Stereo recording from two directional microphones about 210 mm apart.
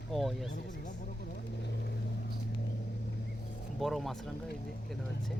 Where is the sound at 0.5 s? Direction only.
40° left (ahead or behind).